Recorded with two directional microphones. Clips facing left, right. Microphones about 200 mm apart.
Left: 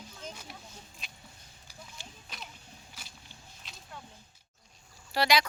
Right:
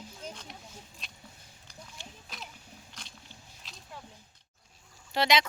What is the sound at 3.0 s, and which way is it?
Biting, 5° left (ahead or behind).